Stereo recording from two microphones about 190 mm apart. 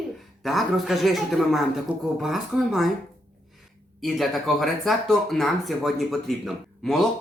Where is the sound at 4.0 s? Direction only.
Centre (ahead or behind).